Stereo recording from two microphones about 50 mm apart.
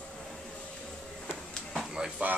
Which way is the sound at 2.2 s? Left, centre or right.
Right.